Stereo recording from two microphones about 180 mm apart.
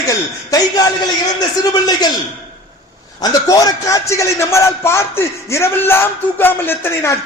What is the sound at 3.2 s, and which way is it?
A man's voice, 20° left (ahead or behind).